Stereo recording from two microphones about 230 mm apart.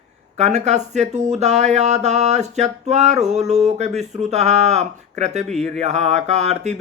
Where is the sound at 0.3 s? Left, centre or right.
Right.